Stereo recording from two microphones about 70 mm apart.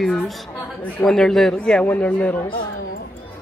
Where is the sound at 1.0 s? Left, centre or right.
Centre.